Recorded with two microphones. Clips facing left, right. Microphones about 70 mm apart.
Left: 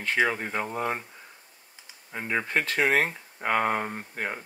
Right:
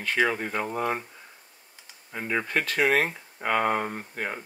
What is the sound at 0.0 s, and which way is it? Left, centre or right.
Speech, centre.